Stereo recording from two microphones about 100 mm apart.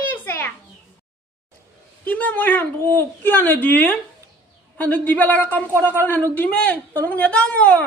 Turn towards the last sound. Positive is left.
turn(degrees=15)  # may be behind; listen again after turning